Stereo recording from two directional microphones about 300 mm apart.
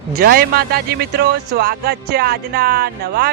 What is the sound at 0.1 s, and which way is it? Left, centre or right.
Speech, right.